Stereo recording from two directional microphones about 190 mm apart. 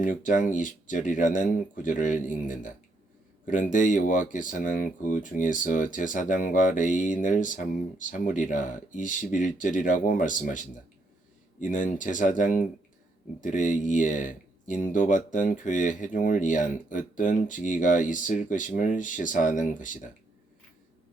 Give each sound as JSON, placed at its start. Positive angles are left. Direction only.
{"t": 0.0, "sound": "speech", "side_deg": 45}